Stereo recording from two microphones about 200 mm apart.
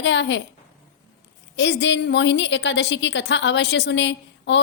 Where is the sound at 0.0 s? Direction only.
65° left (ahead or behind).